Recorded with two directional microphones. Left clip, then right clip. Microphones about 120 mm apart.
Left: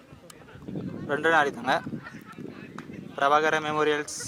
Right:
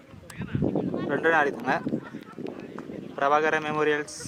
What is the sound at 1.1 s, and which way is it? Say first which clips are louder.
Speech: left 1 dB; 15° left (ahead or behind).